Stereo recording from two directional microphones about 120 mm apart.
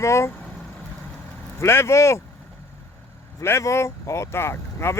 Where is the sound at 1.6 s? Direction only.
20° left (ahead or behind).